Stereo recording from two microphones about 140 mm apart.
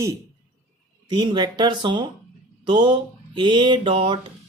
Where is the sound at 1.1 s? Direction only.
30° right (ahead or behind).